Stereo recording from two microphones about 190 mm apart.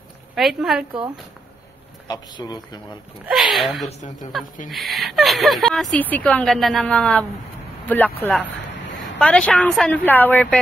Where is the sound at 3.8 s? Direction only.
35° left (ahead or behind).